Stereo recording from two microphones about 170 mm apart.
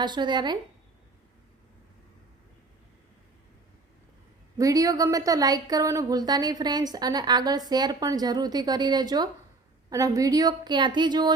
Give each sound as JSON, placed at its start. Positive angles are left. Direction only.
{"t": 0.0, "sound": "speech", "side_deg": -25}
{"t": 4.5, "sound": "speech", "side_deg": -20}